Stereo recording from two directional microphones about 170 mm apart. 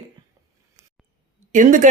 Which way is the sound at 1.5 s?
50° right (ahead or behind).